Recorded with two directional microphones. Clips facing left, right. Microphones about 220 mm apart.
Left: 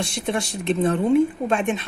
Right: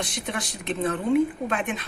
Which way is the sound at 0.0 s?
25° left (ahead or behind).